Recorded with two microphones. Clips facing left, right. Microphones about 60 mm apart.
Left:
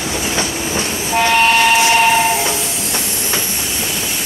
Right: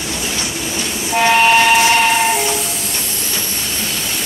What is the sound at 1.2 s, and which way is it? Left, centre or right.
Train, centre.